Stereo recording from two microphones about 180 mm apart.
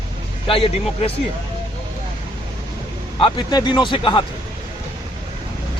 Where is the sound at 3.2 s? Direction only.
25° left (ahead or behind).